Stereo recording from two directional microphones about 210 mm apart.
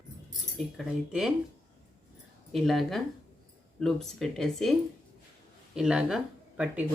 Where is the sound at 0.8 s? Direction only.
Centre (ahead or behind).